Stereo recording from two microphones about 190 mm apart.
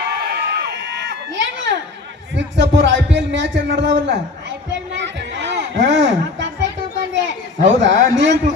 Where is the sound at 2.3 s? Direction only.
70° right (ahead or behind).